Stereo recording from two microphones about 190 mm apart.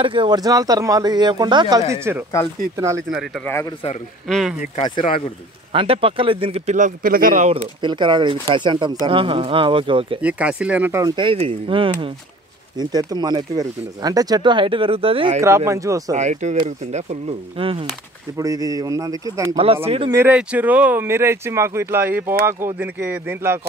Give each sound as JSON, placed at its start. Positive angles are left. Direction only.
{"t": 0.0, "sound": "speech", "side_deg": -25}
{"t": 3.1, "sound": "speech", "side_deg": -5}
{"t": 5.7, "sound": "speech", "side_deg": -30}
{"t": 7.8, "sound": "speech", "side_deg": -25}
{"t": 10.2, "sound": "speech", "side_deg": -5}
{"t": 15.4, "sound": "speech", "side_deg": -15}
{"t": 16.1, "sound": "speech", "side_deg": -40}
{"t": 18.4, "sound": "speech", "side_deg": -20}
{"t": 19.6, "sound": "speech", "side_deg": -30}
{"t": 20.1, "sound": "speech", "side_deg": -10}